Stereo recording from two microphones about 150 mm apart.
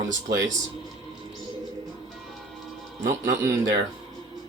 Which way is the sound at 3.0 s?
80° right.